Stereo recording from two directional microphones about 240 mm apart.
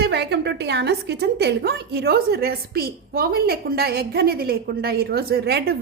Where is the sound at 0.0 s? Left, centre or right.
Right.